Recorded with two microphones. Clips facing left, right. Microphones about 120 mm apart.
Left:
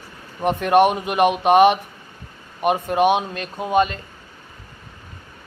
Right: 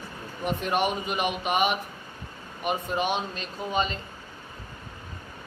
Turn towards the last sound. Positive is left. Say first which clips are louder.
# left 9 dB
turn(degrees=55)  # may be behind; listen again after turning